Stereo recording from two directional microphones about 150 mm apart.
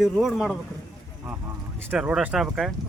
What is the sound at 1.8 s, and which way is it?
Speech, 10° right (ahead or behind).